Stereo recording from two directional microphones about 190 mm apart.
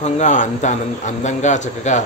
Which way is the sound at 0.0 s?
40° left (ahead or behind).